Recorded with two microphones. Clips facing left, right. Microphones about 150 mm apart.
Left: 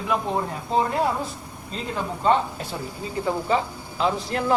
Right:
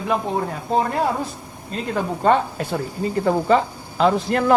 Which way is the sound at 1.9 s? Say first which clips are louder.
Right 3 dB; 55° right (ahead or behind).